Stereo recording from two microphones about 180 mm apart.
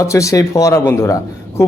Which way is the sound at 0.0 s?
15° left (ahead or behind).